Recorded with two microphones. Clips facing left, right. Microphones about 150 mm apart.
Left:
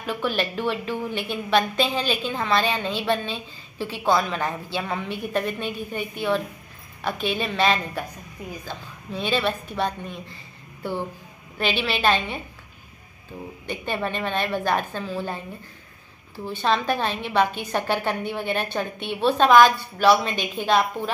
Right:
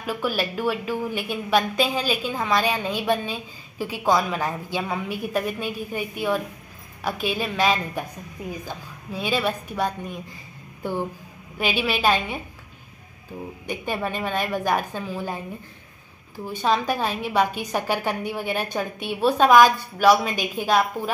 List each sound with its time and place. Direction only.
0.0 s a woman's voice: 5° right (ahead or behind)
13.7 s a woman's voice: 10° right (ahead or behind)
16.4 s a woman's voice: 10° right (ahead or behind)